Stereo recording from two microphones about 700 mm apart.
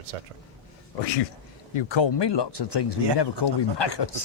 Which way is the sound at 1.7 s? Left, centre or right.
Left.